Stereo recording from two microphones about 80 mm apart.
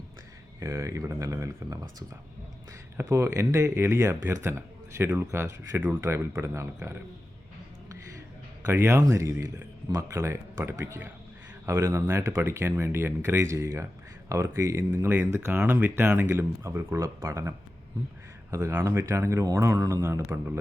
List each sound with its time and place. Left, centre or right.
0.6 s speech: right
3.0 s speech: right
8.6 s speech: right
18.7 s speech: right